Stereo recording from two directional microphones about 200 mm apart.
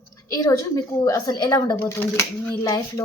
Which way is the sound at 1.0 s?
20° left (ahead or behind).